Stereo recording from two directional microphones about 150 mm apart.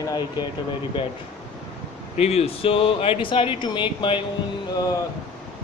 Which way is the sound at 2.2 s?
45° left (ahead or behind).